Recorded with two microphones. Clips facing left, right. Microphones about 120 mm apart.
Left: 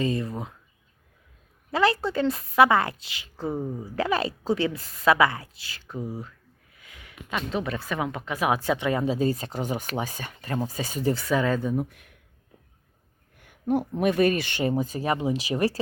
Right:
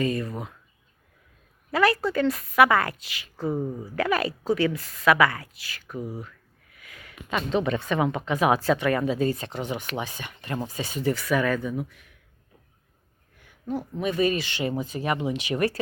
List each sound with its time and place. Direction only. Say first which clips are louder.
0.0 s speech: even; 25° left (ahead or behind)
1.7 s a woman's voice: right 1 dB; 25° left (ahead or behind)
3.5 s speech: right 2 dB; centre (ahead or behind)
3.9 s a woman's voice: right 1 dB; 25° left (ahead or behind)
7.3 s speech: right 4 dB; centre (ahead or behind); by 9.0 s 20° left (ahead or behind)
9.0 s speech: even; 35° left (ahead or behind)
11.8 s speech: left 3 dB; 55° left (ahead or behind)
13.4 s a sound: left 6 dB; 55° left (ahead or behind)
14.0 s speech: left 1 dB; 55° left (ahead or behind); by 15.8 s 30° left (ahead or behind)